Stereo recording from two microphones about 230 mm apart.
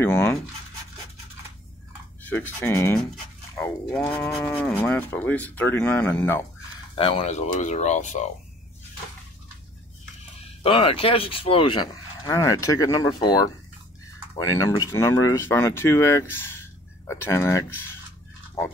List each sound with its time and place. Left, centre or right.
0.0 s a sound: centre
2.2 s speech: centre
4.6 s speech: centre
7.0 s speech: left
10.6 s speech: left